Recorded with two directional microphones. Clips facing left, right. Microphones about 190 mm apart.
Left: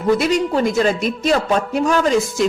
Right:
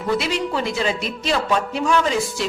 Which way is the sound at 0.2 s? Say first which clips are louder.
Left 6 dB; 45° left (ahead or behind).